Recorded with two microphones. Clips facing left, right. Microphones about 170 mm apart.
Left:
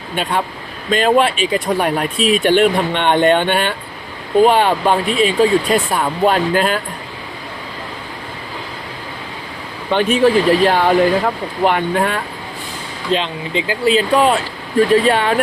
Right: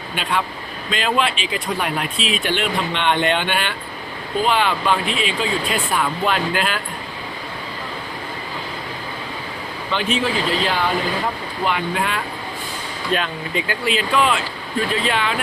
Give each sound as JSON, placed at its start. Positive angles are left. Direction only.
{"t": 0.9, "sound": "speech", "side_deg": 45}
{"t": 9.9, "sound": "speech", "side_deg": 55}
{"t": 13.1, "sound": "speech", "side_deg": 25}